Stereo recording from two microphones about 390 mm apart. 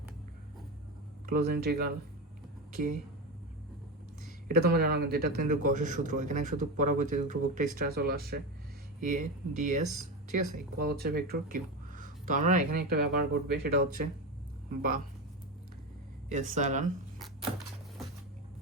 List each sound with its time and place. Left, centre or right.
1.3 s a man's voice: right
4.4 s a man's voice: right
16.3 s a man's voice: centre